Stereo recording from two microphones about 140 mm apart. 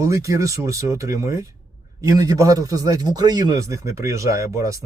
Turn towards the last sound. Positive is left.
turn(degrees=-20)  # may be behind; listen again after turning